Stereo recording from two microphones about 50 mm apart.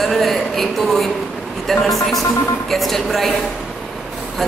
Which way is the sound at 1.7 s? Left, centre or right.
Centre.